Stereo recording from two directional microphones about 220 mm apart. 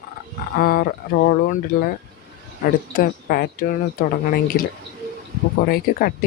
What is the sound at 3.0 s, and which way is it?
Speech, 45° left (ahead or behind).